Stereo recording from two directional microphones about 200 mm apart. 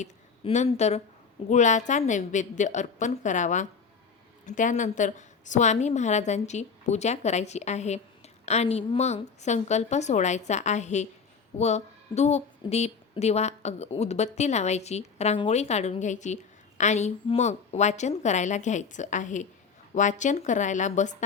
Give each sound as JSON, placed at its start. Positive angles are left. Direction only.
{"t": 0.0, "sound": "a woman's voice", "side_deg": 35}